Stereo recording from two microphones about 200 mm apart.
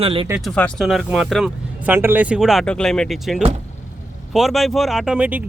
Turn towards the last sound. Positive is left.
turn(degrees=-5)  # may be behind; listen again after turning